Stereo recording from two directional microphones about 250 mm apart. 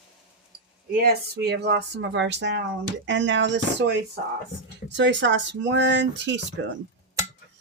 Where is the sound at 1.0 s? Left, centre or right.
Right.